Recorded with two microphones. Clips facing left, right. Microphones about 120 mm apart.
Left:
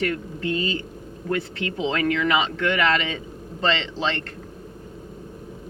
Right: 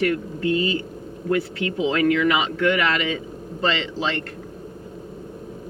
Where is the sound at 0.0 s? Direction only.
30° left (ahead or behind).